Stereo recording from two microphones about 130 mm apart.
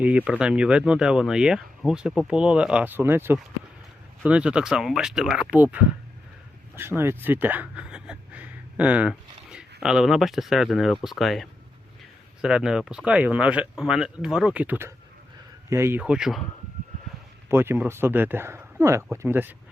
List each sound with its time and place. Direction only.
0.0 s speech: 10° right (ahead or behind)
16.0 s speech: 5° right (ahead or behind)
17.5 s speech: 15° right (ahead or behind)